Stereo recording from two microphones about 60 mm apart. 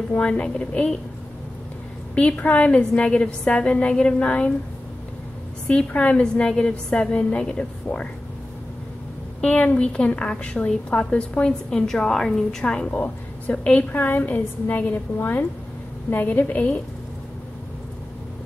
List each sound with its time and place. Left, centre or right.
0.1 s a woman's voice: left
2.1 s a woman's voice: left
5.7 s a woman's voice: centre
9.4 s a woman's voice: centre
12.9 s a woman's voice: left
13.9 s a woman's voice: left